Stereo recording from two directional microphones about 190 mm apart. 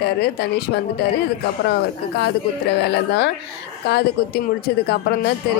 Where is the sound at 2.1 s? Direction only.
60° left (ahead or behind).